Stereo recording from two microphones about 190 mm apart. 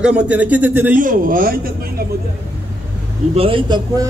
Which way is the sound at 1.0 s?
45° right (ahead or behind).